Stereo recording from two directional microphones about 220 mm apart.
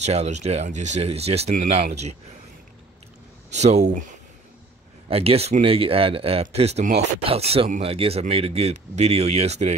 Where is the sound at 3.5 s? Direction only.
30° right (ahead or behind).